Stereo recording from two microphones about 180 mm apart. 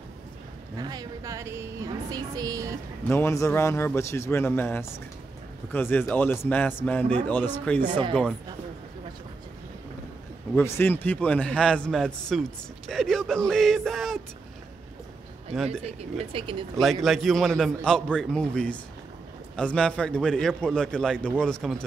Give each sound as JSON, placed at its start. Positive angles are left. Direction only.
{"t": 0.7, "sound": "a woman's voice", "side_deg": -20}
{"t": 3.0, "sound": "a man's voice", "side_deg": 10}
{"t": 10.5, "sound": "a man's voice", "side_deg": 10}
{"t": 15.7, "sound": "speech", "side_deg": -35}
{"t": 16.8, "sound": "a man's voice", "side_deg": 0}